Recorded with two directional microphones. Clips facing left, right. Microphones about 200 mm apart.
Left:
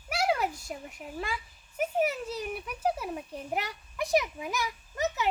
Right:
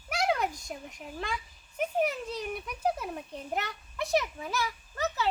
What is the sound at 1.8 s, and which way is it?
A child's voice, 5° left (ahead or behind).